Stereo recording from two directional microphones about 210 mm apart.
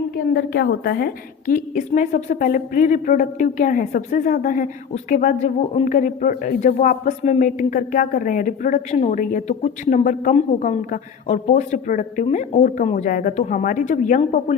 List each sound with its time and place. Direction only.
0.3 s a woman's voice: 50° left (ahead or behind); by 14.5 s 35° left (ahead or behind)